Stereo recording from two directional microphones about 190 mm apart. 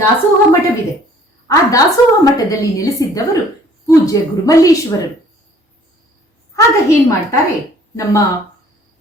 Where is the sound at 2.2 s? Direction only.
20° left (ahead or behind).